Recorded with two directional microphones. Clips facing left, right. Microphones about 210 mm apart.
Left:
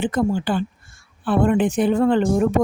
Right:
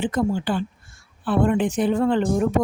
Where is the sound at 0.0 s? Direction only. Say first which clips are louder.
Left 2 dB; 55° left (ahead or behind).